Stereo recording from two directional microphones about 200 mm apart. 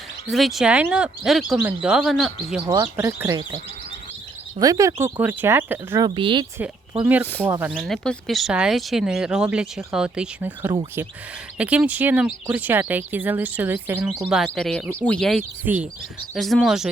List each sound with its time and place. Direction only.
0.3 s speech: centre (ahead or behind)
2.6 s speech: 20° right (ahead or behind)
2.9 s speech: 10° right (ahead or behind)
4.6 s speech: 15° right (ahead or behind)
6.1 s speech: 25° right (ahead or behind)
7.0 s speech: 10° right (ahead or behind)
7.7 s speech: centre (ahead or behind)
15.6 s speech: 10° right (ahead or behind)